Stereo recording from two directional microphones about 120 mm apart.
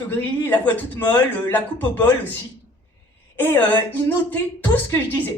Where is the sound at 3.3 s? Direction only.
15° left (ahead or behind).